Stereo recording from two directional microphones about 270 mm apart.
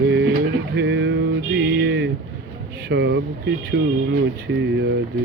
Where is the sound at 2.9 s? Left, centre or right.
Right.